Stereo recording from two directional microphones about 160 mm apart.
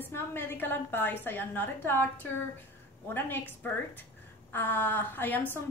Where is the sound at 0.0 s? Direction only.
15° left (ahead or behind).